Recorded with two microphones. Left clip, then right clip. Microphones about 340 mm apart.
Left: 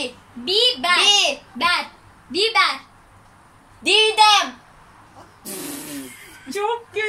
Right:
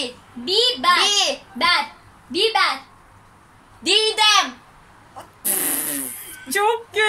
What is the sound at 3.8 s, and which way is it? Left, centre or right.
Speech, centre.